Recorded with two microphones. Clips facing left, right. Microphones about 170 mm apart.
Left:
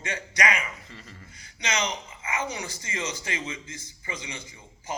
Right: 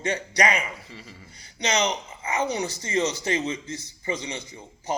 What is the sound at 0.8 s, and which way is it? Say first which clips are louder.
Speech: right 2 dB; 10° right (ahead or behind).